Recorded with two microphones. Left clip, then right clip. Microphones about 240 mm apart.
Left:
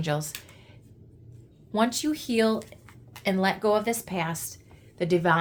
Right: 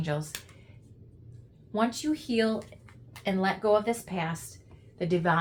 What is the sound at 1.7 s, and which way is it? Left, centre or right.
Speech, left.